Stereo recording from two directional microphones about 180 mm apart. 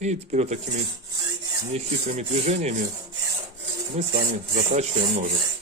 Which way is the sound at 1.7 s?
40° right (ahead or behind).